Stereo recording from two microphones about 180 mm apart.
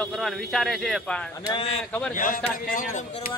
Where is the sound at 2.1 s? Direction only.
50° left (ahead or behind).